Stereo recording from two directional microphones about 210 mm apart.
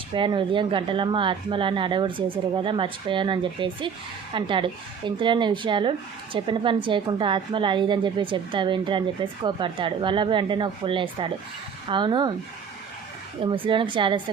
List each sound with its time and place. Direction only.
0.1 s a woman's voice: 25° right (ahead or behind)
13.4 s a woman's voice: 25° right (ahead or behind)